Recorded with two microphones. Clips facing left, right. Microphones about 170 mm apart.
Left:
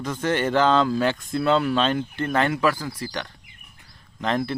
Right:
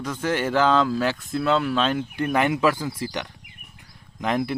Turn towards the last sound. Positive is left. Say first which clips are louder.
# even
turn(degrees=-15)  # may be behind; listen again after turning